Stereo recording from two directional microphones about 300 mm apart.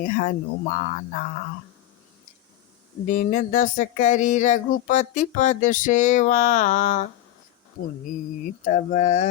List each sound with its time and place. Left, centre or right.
0.0 s speech: left
3.1 s speech: left
8.4 s speech: left